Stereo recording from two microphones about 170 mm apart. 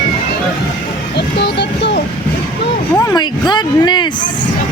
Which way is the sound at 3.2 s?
25° left (ahead or behind).